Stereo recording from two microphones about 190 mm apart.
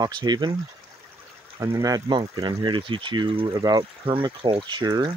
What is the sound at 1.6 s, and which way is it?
Speech, 15° right (ahead or behind).